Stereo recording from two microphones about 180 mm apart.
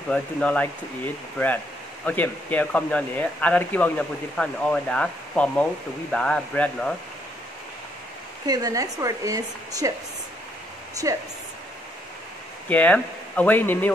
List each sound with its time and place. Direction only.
0.1 s speech: 5° left (ahead or behind)
8.5 s speech: 20° right (ahead or behind)
11.0 s speech: 20° right (ahead or behind)
12.6 s speech: 10° left (ahead or behind)